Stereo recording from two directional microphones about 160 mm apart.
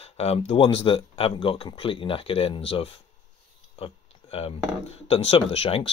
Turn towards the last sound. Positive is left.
turn(degrees=40)  # may be behind; listen again after turning